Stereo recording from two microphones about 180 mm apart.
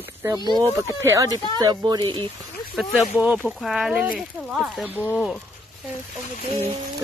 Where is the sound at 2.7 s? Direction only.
Centre (ahead or behind).